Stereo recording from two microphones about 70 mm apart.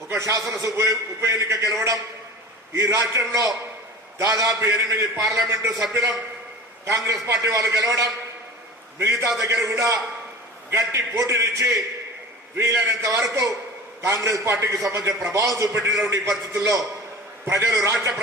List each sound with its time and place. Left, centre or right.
0.1 s a man's voice: right
6.8 s a man's voice: right
15.7 s a man's voice: right